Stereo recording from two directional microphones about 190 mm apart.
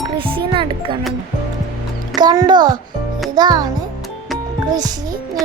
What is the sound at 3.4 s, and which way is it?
Speech, 20° right (ahead or behind).